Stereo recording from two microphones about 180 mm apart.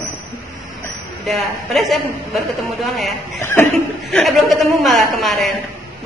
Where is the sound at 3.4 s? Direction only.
15° left (ahead or behind).